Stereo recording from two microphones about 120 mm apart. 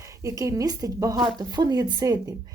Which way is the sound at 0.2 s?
25° right (ahead or behind).